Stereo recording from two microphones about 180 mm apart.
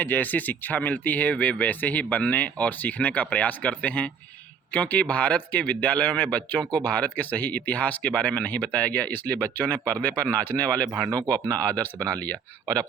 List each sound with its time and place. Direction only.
0.0 s speech: 10° left (ahead or behind)